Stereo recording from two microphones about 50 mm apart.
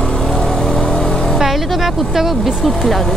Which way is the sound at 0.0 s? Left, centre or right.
Centre.